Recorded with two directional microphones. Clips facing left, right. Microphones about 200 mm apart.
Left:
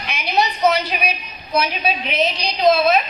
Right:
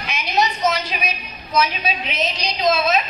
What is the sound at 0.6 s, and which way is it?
A woman's voice, 60° left (ahead or behind).